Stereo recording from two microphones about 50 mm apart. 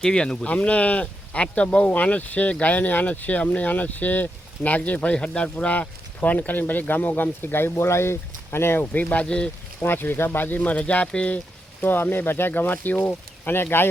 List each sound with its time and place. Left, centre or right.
0.0 s speech: centre
0.4 s speech: left
4.9 s speech: left
8.8 s speech: left
9.2 s speech: left
9.8 s speech: left
11.8 s speech: left